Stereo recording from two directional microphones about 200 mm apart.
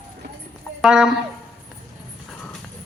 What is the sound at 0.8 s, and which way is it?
Speech, 5° right (ahead or behind).